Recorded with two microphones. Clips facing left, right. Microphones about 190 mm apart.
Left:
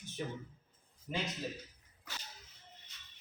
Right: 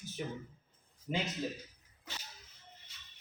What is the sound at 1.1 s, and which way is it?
Speech, 20° right (ahead or behind).